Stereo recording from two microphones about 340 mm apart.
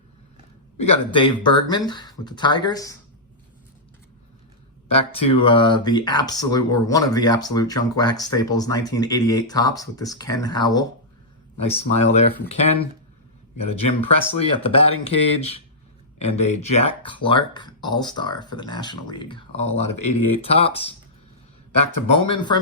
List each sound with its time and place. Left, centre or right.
0.8 s speech: centre
5.3 s speech: centre
22.1 s speech: centre